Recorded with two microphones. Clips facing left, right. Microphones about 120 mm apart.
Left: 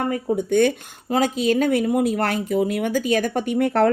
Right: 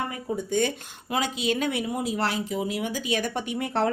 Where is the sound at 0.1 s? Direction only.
60° left (ahead or behind).